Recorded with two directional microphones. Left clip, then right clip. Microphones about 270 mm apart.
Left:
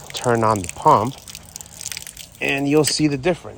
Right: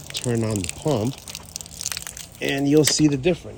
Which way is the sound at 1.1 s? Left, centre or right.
Centre.